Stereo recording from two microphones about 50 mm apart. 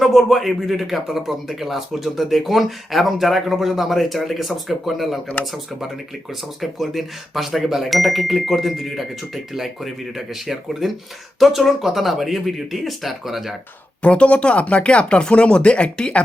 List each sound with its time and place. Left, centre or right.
0.0 s speech: centre
6.6 s speech: centre
14.0 s speech: left